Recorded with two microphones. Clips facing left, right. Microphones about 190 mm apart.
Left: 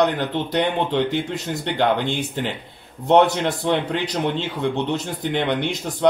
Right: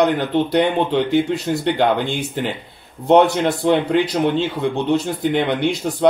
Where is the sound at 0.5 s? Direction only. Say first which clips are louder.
Right 2 dB; 15° right (ahead or behind).